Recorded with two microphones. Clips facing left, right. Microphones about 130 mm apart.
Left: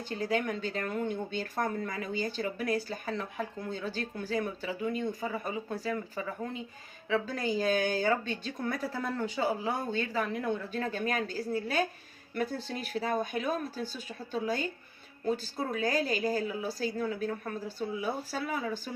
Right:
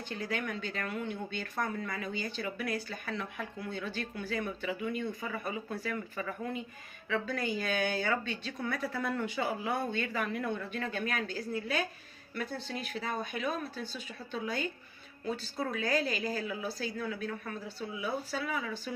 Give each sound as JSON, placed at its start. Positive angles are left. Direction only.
{"t": 0.1, "sound": "speech", "side_deg": 40}
{"t": 7.1, "sound": "speech", "side_deg": 30}